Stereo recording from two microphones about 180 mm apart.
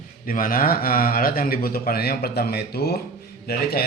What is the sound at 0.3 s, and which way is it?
A man's voice, 50° left (ahead or behind).